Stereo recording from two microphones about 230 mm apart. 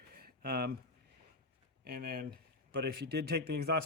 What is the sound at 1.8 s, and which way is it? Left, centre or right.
A man's voice, right.